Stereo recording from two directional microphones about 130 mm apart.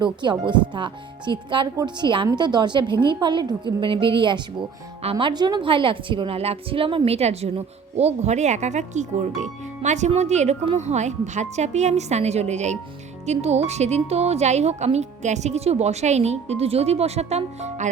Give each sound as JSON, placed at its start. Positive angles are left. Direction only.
{"t": 0.0, "sound": "a woman's voice", "side_deg": -35}